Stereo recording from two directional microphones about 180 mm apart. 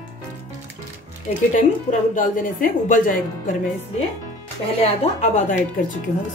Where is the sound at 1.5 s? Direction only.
45° left (ahead or behind).